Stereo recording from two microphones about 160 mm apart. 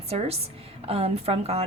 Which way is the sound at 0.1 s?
40° right (ahead or behind).